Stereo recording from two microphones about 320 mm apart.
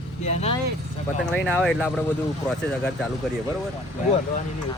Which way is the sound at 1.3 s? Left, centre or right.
Centre.